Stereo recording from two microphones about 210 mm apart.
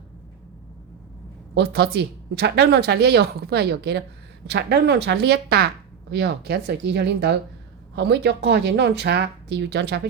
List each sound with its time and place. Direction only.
1.5 s speech: 50° right (ahead or behind)